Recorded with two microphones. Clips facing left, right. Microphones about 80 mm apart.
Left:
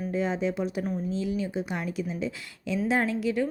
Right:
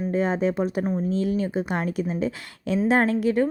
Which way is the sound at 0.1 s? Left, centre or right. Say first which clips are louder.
Right 4 dB; right.